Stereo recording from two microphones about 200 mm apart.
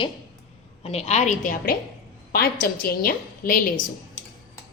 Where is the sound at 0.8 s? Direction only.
30° left (ahead or behind); by 3.6 s 45° left (ahead or behind).